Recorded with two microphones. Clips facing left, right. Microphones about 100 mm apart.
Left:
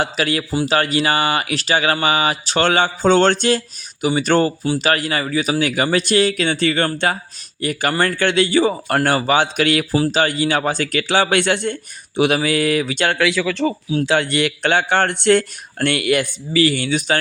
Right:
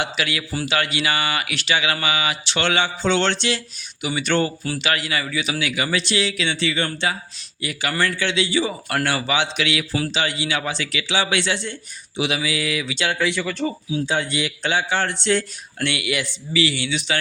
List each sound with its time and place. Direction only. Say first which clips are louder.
0.0 s speech: left 5 dB; 40° left (ahead or behind)
9.0 s speech: left 5 dB; 40° left (ahead or behind)
13.1 s a man's voice: left 5 dB; 90° left; by 17.2 s 45° left (ahead or behind)